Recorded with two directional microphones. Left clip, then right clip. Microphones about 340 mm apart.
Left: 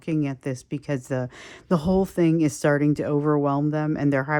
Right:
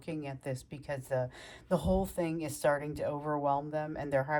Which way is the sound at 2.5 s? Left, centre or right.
Centre.